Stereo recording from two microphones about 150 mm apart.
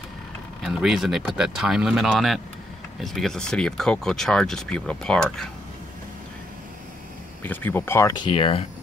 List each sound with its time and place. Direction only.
0.6 s speech: centre (ahead or behind)
7.4 s speech: 15° left (ahead or behind)
8.1 s speech: 35° left (ahead or behind)